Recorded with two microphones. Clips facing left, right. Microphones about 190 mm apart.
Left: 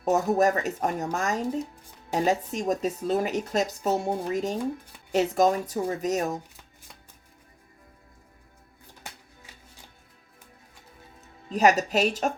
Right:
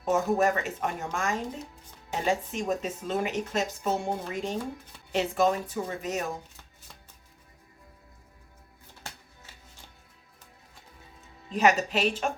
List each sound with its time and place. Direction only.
0.0 s speech: 40° left (ahead or behind)
11.4 s speech: 40° left (ahead or behind)